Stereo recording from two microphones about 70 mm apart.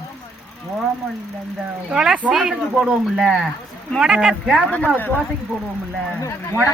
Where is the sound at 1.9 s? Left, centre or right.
Centre.